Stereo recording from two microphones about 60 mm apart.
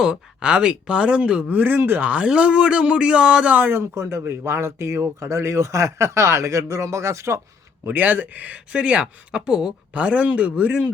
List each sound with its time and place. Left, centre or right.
0.0 s speech: centre; by 2.0 s right
2.0 s speech: centre
3.5 s speech: right
7.9 s speech: right